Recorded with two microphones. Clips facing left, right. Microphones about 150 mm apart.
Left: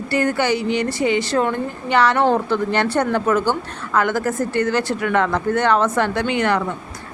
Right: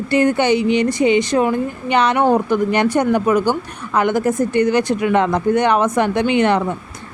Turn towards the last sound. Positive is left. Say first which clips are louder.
# right 4 dB
turn(degrees=-20)  # may be behind; listen again after turning